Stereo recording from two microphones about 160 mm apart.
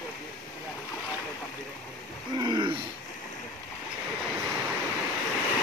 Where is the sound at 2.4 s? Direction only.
30° right (ahead or behind).